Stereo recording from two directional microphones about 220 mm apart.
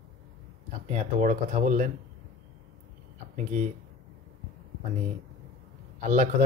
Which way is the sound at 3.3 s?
35° right (ahead or behind).